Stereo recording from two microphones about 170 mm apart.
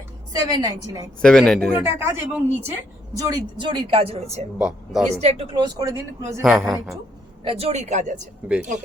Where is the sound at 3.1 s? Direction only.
25° right (ahead or behind).